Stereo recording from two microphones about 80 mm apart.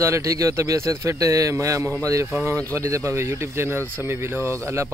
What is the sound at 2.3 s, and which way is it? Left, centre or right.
Speech, right.